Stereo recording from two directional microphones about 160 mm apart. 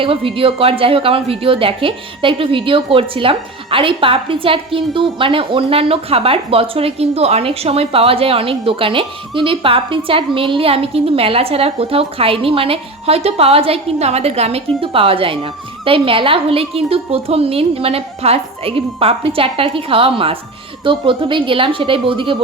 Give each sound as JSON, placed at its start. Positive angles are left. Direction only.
{"t": 0.0, "sound": "a woman's voice", "side_deg": -35}